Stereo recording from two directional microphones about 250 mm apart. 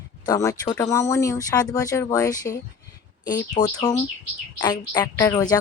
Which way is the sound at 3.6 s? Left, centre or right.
Left.